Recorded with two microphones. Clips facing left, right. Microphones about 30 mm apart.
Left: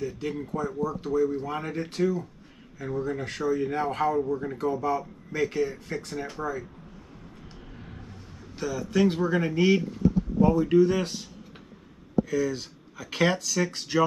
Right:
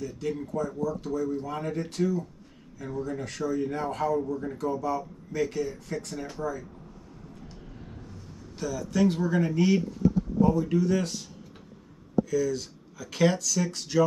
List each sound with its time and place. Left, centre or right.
0.0 s a man's voice: left
7.4 s vehicle: left
8.5 s a man's voice: left
12.3 s a man's voice: left